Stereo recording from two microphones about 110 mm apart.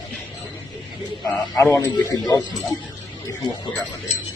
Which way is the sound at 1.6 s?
25° left (ahead or behind).